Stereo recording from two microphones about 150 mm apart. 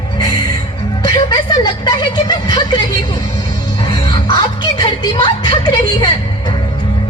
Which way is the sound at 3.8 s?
30° left (ahead or behind).